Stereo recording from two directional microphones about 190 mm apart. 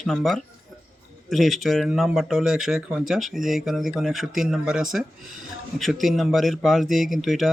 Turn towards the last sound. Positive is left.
turn(degrees=0)  # may be behind; listen again after turning